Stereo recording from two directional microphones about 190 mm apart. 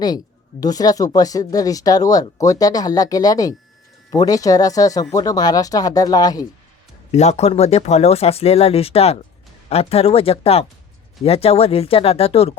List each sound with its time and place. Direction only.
0.6 s speech: 20° left (ahead or behind)
7.1 s speech: 35° left (ahead or behind)